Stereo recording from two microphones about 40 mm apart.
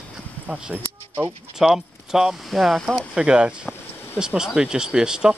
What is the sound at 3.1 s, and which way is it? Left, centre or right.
Speech, right.